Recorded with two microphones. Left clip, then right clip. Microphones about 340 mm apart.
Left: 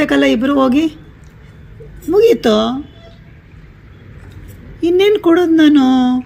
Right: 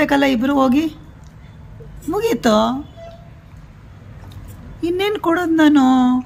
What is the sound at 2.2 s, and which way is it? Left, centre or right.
Speech, centre.